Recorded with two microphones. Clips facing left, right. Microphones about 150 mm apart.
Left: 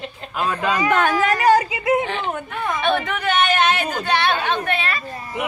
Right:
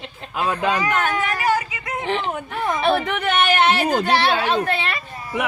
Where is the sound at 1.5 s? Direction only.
30° left (ahead or behind).